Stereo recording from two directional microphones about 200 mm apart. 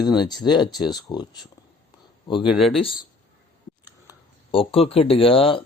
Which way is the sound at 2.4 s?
Centre (ahead or behind).